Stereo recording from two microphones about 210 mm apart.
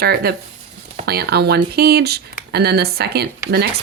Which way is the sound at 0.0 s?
50° right (ahead or behind).